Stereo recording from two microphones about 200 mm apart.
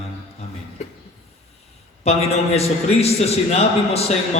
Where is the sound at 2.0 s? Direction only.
30° left (ahead or behind).